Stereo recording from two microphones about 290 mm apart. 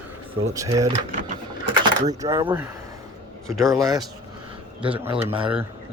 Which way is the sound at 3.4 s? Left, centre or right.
Centre.